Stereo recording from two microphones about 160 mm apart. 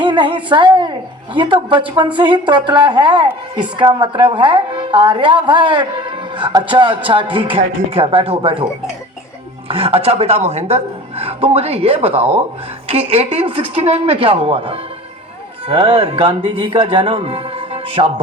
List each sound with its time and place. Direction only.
0.0 s a woman's voice: 30° right (ahead or behind)
9.6 s a woman's voice: 35° right (ahead or behind)